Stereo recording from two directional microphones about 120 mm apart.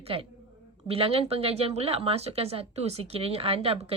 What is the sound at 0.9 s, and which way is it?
Speech, 55° right (ahead or behind).